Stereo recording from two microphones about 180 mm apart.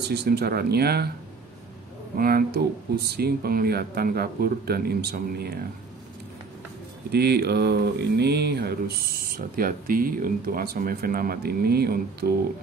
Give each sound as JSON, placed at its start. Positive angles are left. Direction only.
{"t": 0.1, "sound": "speech", "side_deg": -65}
{"t": 2.1, "sound": "speech", "side_deg": -55}
{"t": 7.1, "sound": "speech", "side_deg": -65}